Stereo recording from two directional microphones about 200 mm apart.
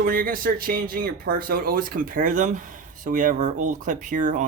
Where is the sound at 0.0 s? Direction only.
45° right (ahead or behind).